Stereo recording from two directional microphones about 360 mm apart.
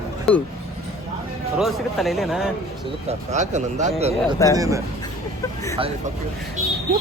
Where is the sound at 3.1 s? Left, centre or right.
Centre.